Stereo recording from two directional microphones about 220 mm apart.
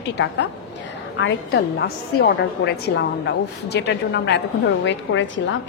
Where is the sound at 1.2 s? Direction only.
50° left (ahead or behind).